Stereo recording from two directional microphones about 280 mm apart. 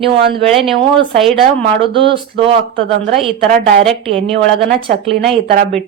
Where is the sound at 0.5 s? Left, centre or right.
Centre.